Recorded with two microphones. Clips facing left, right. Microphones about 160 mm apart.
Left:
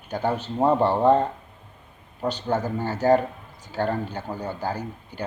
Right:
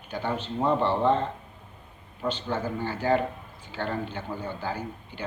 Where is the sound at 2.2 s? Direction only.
40° left (ahead or behind).